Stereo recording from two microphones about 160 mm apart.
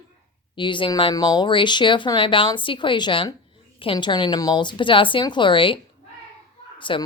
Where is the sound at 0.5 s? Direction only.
30° left (ahead or behind).